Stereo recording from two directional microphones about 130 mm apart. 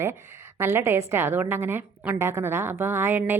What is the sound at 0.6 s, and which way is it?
A woman's voice, 20° right (ahead or behind).